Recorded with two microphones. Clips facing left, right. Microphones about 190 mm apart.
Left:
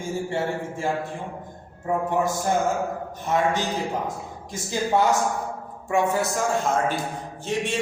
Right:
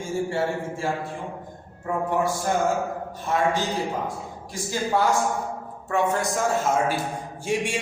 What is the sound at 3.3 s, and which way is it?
Speech, 20° left (ahead or behind).